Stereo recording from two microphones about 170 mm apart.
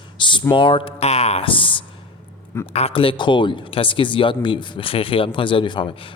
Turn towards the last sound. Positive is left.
turn(degrees=30)  # may be behind; listen again after turning